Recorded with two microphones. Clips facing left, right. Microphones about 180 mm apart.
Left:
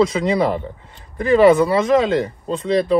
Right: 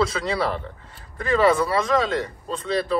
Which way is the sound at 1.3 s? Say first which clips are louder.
Left 7 dB; 25° left (ahead or behind).